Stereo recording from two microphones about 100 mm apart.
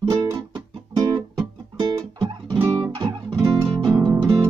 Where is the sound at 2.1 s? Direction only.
60° right (ahead or behind).